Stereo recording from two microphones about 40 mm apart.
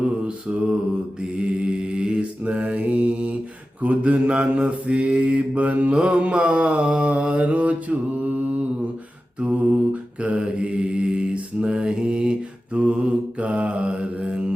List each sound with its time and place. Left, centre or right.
0.0 s mantra: right
2.4 s mantra: right